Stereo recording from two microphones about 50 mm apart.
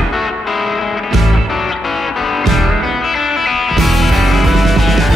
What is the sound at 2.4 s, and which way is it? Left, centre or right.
Music, centre.